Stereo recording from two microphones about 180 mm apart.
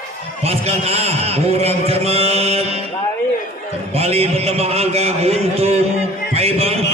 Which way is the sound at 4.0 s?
35° right (ahead or behind).